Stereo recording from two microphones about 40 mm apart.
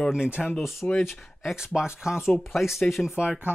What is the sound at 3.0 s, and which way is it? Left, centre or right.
Speech, right.